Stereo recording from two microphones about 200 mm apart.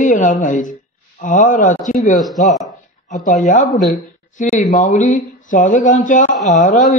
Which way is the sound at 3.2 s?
40° left (ahead or behind).